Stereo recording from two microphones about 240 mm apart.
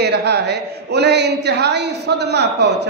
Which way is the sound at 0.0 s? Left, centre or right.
Right.